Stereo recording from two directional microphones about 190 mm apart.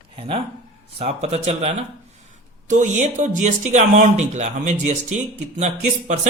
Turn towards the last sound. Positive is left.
turn(degrees=-35)  # may be behind; listen again after turning